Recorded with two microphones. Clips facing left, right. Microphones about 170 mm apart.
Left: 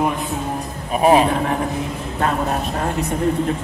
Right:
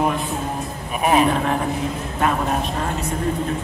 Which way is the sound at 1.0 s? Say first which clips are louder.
Left 5 dB; 30° left (ahead or behind).